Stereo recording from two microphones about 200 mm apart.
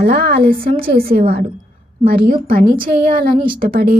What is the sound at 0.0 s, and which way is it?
A woman's voice, 50° right (ahead or behind).